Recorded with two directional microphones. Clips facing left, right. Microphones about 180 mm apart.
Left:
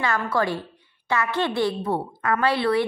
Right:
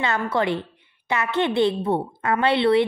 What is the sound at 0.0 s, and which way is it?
A woman's voice, 20° right (ahead or behind).